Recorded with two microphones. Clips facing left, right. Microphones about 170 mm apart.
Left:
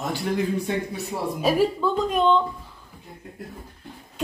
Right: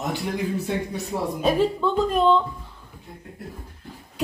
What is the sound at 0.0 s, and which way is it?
Speech, 20° right (ahead or behind).